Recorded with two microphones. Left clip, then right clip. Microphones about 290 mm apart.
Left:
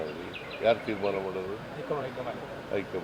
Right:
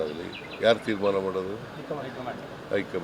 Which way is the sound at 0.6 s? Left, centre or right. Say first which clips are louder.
Right 3 dB; right.